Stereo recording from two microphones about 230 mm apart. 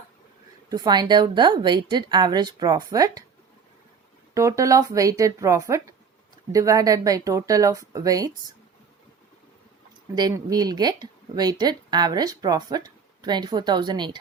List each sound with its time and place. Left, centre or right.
0.7 s a woman's voice: centre
4.4 s speech: centre
10.2 s speech: centre